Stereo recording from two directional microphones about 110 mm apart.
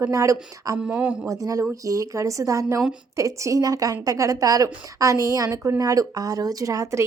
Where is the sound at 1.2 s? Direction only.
30° right (ahead or behind).